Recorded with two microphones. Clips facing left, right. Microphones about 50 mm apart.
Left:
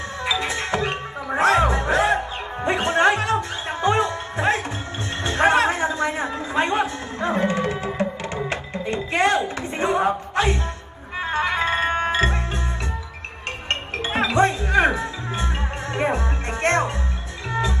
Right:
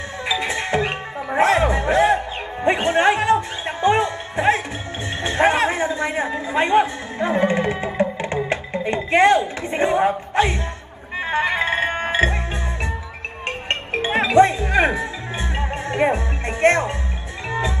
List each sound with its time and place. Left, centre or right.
0.2 s music: right
5.2 s a sound: right
8.5 s music: right
9.7 s speech: right
11.3 s music: right
13.7 s music: right